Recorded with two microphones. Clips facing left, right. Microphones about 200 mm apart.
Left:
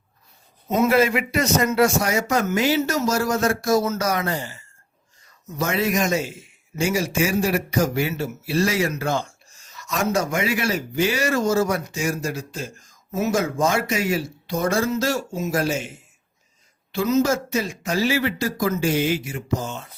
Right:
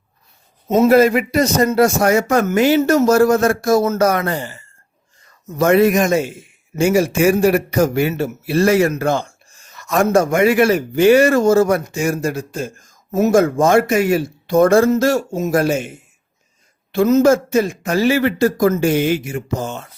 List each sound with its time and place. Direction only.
0.9 s a man's voice: 40° right (ahead or behind)
2.0 s speech: 55° right (ahead or behind)